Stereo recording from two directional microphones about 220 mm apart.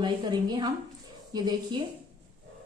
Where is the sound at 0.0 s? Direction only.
20° right (ahead or behind).